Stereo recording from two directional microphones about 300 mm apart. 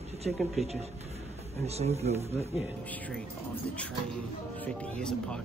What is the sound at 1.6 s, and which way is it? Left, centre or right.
Speech, right.